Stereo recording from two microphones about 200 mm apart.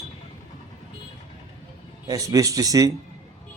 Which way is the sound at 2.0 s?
15° right (ahead or behind).